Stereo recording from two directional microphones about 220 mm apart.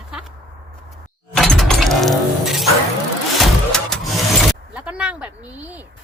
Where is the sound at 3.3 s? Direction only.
Centre (ahead or behind).